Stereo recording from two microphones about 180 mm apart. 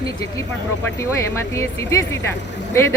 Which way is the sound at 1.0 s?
15° left (ahead or behind).